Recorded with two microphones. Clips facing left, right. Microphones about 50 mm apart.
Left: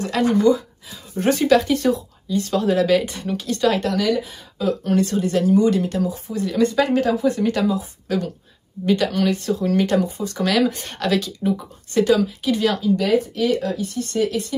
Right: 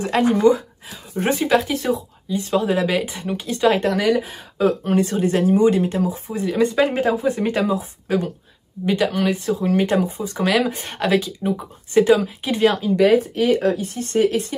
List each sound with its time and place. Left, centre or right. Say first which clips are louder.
0.0 s speech: right 1 dB; right
1.1 s speech: left 2 dB; centre; by 4.7 s right
4.8 s speech: right 1 dB; right
8.8 s speech: even; centre; by 14.5 s right